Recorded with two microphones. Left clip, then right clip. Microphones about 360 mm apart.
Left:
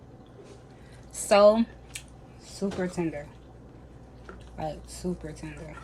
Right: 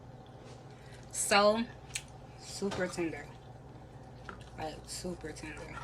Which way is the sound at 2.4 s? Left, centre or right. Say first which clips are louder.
Left 3 dB; centre.